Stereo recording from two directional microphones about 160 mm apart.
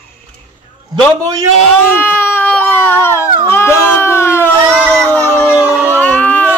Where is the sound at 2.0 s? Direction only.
15° left (ahead or behind).